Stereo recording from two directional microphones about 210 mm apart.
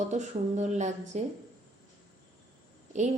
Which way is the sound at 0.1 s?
35° right (ahead or behind).